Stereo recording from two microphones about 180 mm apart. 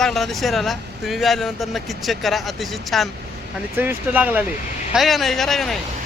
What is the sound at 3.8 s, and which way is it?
Speech, 10° right (ahead or behind).